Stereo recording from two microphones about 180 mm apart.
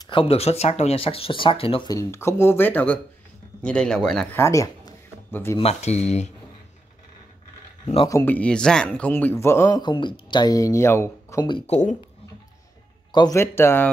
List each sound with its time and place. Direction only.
0.0 s speech: 30° left (ahead or behind); by 4.4 s 5° left (ahead or behind)
4.4 s a sound: 15° left (ahead or behind)
5.6 s speech: 35° left (ahead or behind)
7.8 s speech: 30° left (ahead or behind)
8.1 s speech: 20° left (ahead or behind)
8.4 s speech: 5° left (ahead or behind); by 11.7 s 25° left (ahead or behind)
11.7 s speech: 45° left (ahead or behind)
13.1 s speech: 20° left (ahead or behind)